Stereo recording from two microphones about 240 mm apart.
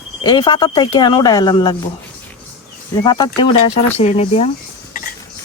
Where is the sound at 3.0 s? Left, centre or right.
Centre.